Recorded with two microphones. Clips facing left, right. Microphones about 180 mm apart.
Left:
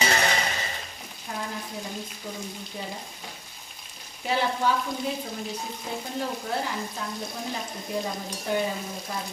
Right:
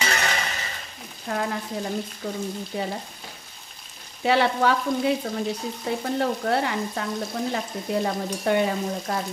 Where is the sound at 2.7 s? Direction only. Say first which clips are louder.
Right 8 dB; 65° right (ahead or behind).